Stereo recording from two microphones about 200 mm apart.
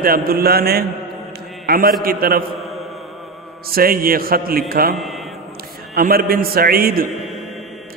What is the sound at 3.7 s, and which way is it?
A man's voice, 45° right (ahead or behind).